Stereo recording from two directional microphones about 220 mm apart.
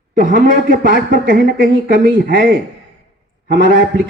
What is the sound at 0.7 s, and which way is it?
A man's voice, 40° right (ahead or behind).